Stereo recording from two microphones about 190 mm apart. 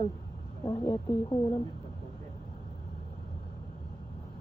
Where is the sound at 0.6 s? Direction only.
15° left (ahead or behind).